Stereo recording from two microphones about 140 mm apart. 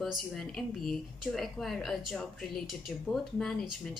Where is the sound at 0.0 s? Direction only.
Centre (ahead or behind).